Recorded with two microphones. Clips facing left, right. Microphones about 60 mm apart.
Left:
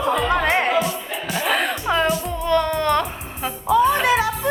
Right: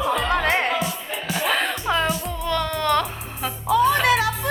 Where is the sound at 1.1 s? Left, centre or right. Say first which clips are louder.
Left 1 dB; centre.